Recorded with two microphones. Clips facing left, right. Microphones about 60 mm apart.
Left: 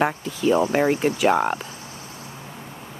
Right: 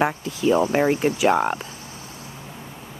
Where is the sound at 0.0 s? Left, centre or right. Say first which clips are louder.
Even; centre.